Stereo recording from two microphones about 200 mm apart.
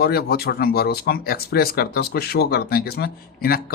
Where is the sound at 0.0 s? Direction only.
50° left (ahead or behind).